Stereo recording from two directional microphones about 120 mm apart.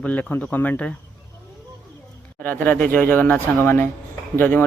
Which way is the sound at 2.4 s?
15° left (ahead or behind).